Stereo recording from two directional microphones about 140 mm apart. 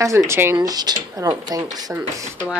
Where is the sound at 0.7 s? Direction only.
30° right (ahead or behind).